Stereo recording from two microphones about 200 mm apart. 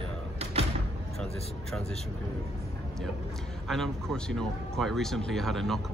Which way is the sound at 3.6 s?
Centre (ahead or behind).